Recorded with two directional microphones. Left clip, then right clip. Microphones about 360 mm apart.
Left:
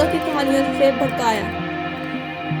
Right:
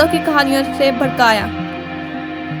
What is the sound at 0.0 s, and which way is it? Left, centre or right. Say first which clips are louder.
Speech: right 5 dB; right.